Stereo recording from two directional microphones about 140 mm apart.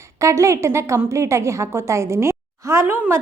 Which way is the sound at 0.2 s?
20° right (ahead or behind).